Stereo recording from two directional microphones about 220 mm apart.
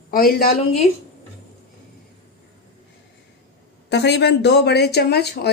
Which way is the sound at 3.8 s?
50° left (ahead or behind).